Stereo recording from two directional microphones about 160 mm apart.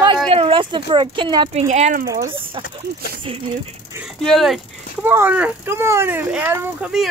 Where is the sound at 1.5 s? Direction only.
45° right (ahead or behind).